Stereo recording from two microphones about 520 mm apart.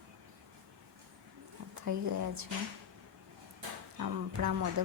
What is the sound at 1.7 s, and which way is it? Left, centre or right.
Speech, right.